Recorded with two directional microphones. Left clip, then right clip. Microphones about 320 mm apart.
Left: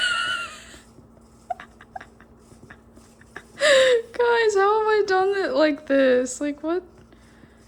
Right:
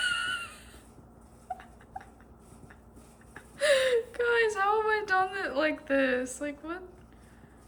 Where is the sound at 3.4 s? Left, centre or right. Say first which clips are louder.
Left 8 dB; centre.